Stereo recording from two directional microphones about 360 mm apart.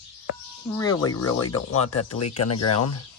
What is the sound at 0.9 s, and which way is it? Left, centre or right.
Speech, left.